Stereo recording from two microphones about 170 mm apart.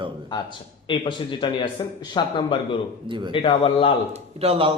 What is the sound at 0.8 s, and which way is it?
A man's voice, 30° left (ahead or behind).